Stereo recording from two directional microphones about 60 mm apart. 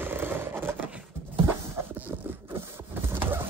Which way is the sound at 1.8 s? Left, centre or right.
Right.